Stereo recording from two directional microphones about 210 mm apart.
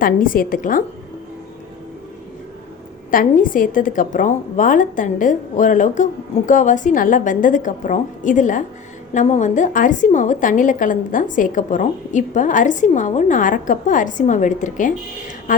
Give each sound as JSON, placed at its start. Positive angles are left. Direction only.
{"t": 0.0, "sound": "a woman's voice", "side_deg": 40}
{"t": 3.1, "sound": "a woman's voice", "side_deg": 40}